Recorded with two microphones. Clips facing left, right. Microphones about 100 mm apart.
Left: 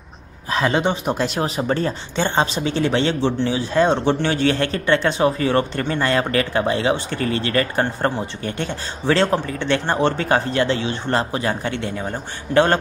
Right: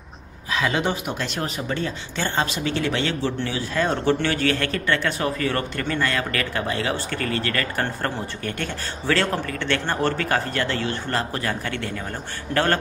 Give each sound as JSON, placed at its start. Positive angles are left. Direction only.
{"t": 0.5, "sound": "a woman's voice", "side_deg": 35}
{"t": 2.1, "sound": "speech", "side_deg": 25}